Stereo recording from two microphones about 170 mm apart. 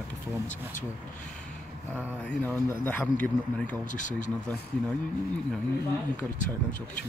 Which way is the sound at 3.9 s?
50° left (ahead or behind).